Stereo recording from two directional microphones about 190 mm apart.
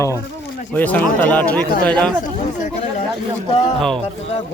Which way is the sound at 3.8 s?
Centre (ahead or behind).